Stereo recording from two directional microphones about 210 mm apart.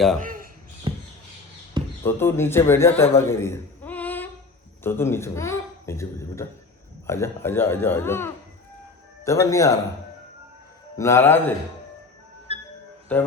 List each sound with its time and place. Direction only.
0.2 s speech: 40° right (ahead or behind)
0.9 s squawk: 20° right (ahead or behind)
2.0 s speech: 10° left (ahead or behind)
3.2 s a sound: 10° left (ahead or behind)
4.8 s speech: 10° left (ahead or behind)
10.9 s speech: 15° left (ahead or behind)
12.5 s music: 30° right (ahead or behind)
13.1 s speech: 5° left (ahead or behind)